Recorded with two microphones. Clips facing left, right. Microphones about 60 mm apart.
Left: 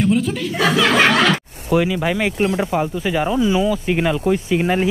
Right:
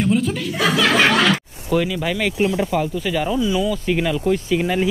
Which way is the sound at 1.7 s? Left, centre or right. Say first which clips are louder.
Left 3 dB; centre.